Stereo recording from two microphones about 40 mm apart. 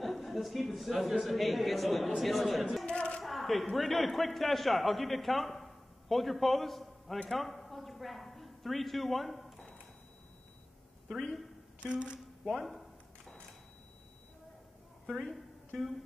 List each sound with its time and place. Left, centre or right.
0.0 s a man's voice: centre
2.9 s a sound: left
3.3 s a man's voice: centre
11.8 s a woman's voice: right
12.4 s a sound: centre
15.0 s a man's voice: centre